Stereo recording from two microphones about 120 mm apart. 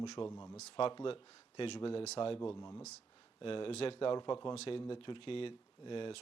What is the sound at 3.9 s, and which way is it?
Speech, 40° left (ahead or behind).